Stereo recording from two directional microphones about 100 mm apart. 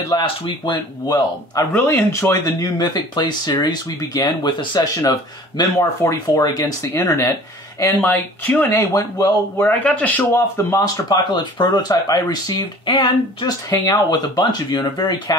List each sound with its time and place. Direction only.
0.1 s speech: 50° left (ahead or behind)
1.7 s speech: 20° left (ahead or behind)
2.8 s speech: 45° left (ahead or behind); by 8.8 s 20° left (ahead or behind)
8.9 s speech: 35° left (ahead or behind)
9.7 s speech: 15° left (ahead or behind)
10.7 s speech: 45° left (ahead or behind)
13.7 s speech: 40° left (ahead or behind)